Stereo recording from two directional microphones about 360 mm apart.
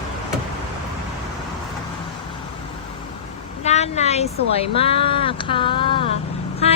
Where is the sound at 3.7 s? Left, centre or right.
Centre.